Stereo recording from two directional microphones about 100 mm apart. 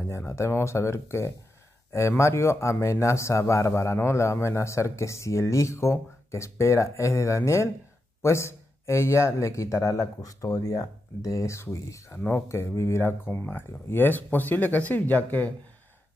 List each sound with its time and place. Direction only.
0.1 s speech: 30° left (ahead or behind)